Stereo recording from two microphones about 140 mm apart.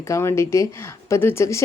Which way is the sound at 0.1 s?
20° left (ahead or behind).